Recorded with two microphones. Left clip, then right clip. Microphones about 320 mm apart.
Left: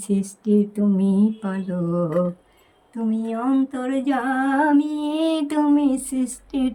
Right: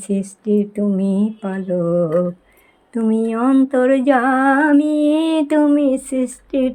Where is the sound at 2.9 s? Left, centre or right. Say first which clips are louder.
Right 7 dB; centre.